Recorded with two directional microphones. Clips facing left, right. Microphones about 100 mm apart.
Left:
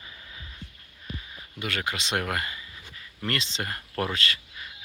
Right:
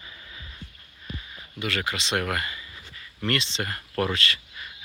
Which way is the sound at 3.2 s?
10° left (ahead or behind).